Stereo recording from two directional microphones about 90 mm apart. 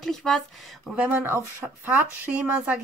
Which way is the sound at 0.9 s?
20° right (ahead or behind).